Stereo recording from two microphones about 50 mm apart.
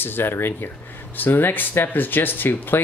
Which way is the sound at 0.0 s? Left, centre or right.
Left.